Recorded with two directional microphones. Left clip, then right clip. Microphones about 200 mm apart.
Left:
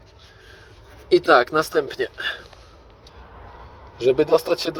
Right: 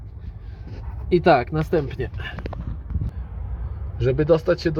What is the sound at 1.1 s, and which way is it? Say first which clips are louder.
Speech: left 2 dB; 5° left (ahead or behind).